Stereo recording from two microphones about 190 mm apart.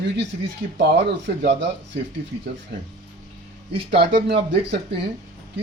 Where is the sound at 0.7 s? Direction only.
60° right (ahead or behind).